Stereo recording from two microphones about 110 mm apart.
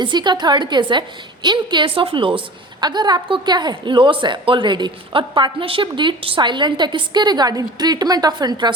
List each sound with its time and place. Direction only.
0.0 s a woman's voice: 45° right (ahead or behind)
2.8 s a woman's voice: 40° right (ahead or behind)